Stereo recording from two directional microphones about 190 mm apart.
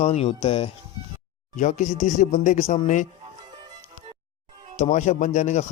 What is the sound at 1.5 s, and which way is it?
Speech, 40° left (ahead or behind).